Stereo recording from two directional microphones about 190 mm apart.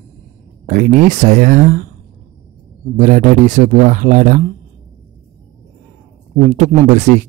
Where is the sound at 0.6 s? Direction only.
45° right (ahead or behind).